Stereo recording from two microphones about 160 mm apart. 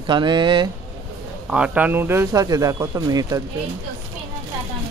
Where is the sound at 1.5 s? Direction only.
5° right (ahead or behind); by 3.4 s 25° right (ahead or behind).